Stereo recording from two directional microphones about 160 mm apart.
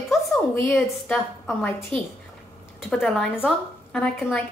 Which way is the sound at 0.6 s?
15° left (ahead or behind).